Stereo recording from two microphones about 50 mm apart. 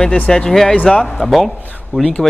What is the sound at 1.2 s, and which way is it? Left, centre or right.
Speech, centre.